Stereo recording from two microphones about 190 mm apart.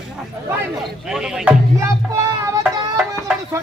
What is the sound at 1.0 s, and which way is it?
Speech, 5° right (ahead or behind).